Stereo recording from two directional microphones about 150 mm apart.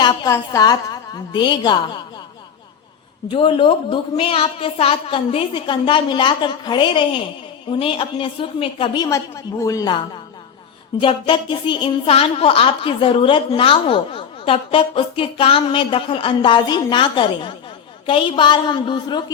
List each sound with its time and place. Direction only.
0.0 s a sound: 30° left (ahead or behind)
0.3 s a woman's voice: 25° left (ahead or behind)
3.2 s a woman's voice: 35° left (ahead or behind)
9.0 s a woman's voice: 20° left (ahead or behind)